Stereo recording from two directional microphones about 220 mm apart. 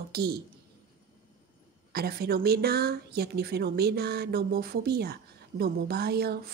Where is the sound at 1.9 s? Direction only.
45° right (ahead or behind).